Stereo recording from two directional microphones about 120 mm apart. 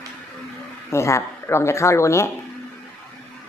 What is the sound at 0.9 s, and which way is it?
Speech, 25° left (ahead or behind).